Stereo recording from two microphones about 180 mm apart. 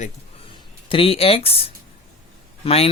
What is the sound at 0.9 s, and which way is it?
Speech, 30° left (ahead or behind).